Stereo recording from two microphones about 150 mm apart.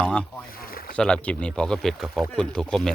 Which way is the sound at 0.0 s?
5° left (ahead or behind).